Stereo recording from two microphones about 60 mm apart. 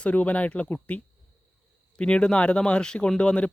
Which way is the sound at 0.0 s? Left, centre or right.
Left.